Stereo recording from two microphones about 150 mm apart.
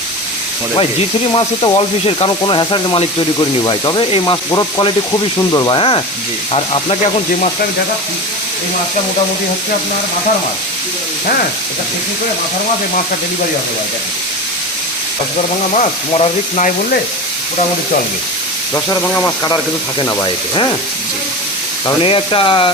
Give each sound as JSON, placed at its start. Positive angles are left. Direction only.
{"t": 0.8, "sound": "speech", "side_deg": 35}
{"t": 15.7, "sound": "speech", "side_deg": 45}
{"t": 18.7, "sound": "speech", "side_deg": 20}
{"t": 22.0, "sound": "speech", "side_deg": 35}